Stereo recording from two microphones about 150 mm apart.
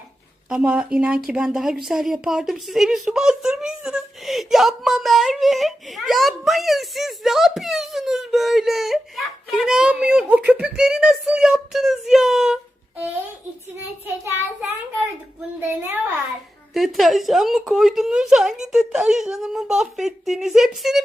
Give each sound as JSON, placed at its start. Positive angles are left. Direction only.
{"t": 0.5, "sound": "speech", "side_deg": -5}
{"t": 15.6, "sound": "speech", "side_deg": -15}
{"t": 16.7, "sound": "speech", "side_deg": 0}